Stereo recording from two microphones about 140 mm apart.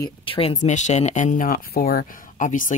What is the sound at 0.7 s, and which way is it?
Speech, 60° left (ahead or behind).